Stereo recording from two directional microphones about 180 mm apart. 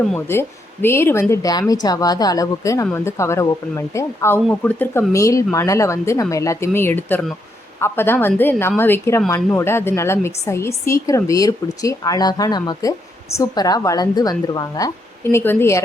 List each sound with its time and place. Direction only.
0.1 s a woman's voice: 10° left (ahead or behind)
4.4 s a woman's voice: 5° left (ahead or behind)